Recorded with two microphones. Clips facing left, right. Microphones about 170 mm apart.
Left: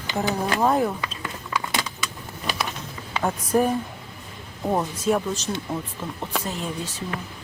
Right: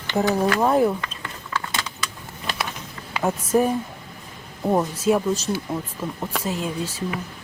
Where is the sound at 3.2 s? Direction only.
5° right (ahead or behind).